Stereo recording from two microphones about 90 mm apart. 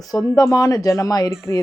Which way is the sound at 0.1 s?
40° left (ahead or behind).